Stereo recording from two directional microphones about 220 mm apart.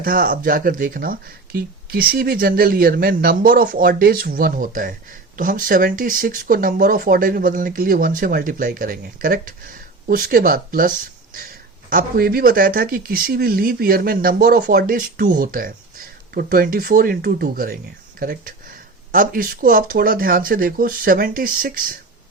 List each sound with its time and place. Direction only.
0.0 s speech: 40° right (ahead or behind)